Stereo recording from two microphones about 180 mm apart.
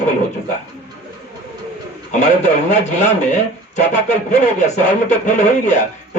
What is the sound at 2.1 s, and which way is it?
Speech, 40° left (ahead or behind).